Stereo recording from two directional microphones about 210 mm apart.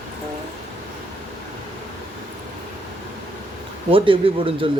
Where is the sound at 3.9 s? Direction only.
25° right (ahead or behind).